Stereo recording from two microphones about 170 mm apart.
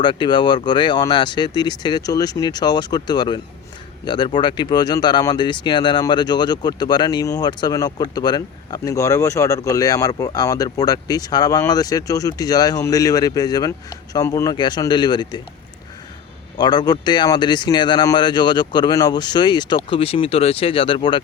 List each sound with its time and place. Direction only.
0.0 s speech: 25° left (ahead or behind)
16.6 s speech: 25° left (ahead or behind)